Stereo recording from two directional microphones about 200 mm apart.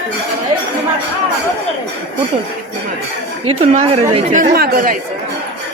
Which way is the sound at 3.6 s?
35° right (ahead or behind).